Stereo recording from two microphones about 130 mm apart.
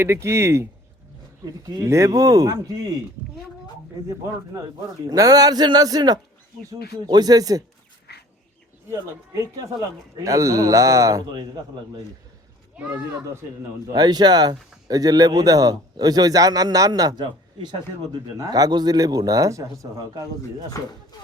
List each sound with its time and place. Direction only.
0.0 s speech: 20° right (ahead or behind)
5.0 s speech: 30° right (ahead or behind)
8.9 s speech: 25° right (ahead or behind)
13.8 s speech: 30° right (ahead or behind)